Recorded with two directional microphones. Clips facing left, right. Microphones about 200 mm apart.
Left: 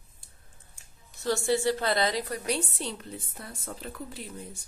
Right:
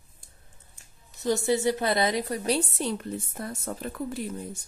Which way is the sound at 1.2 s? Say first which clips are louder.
Right 2 dB; 20° right (ahead or behind).